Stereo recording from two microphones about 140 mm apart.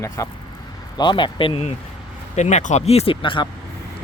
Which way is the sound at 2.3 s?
55° left (ahead or behind).